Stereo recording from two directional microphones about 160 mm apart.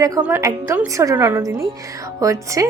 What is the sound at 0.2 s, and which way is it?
A woman's voice, 15° right (ahead or behind).